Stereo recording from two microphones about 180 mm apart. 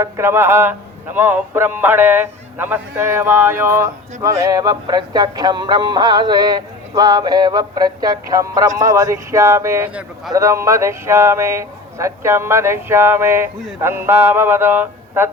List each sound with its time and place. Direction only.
0.0 s a man's voice: 15° right (ahead or behind)